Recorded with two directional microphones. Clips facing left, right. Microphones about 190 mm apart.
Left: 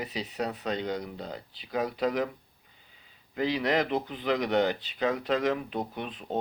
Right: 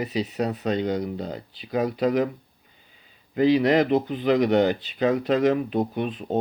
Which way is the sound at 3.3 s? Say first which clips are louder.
Right 8 dB; 15° right (ahead or behind).